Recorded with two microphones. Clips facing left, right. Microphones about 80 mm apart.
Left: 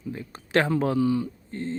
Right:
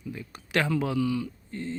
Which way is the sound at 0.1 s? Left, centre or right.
Left.